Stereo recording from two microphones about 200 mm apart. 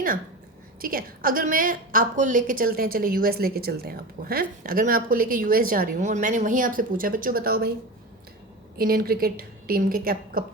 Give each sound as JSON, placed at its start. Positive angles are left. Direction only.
{"t": 0.8, "sound": "a woman's voice", "side_deg": -45}
{"t": 8.8, "sound": "a woman's voice", "side_deg": -45}